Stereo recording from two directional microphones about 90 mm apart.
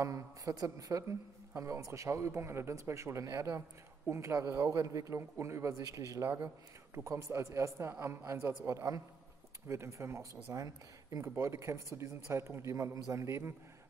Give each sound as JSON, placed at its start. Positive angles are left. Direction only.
{"t": 0.0, "sound": "a man's voice", "side_deg": -40}
{"t": 6.2, "sound": "a man's voice", "side_deg": -25}